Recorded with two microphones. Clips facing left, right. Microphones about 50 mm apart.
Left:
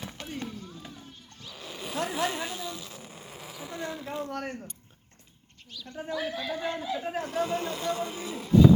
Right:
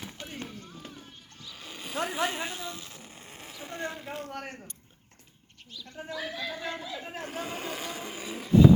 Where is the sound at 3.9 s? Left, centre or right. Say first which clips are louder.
Left 3 dB; centre.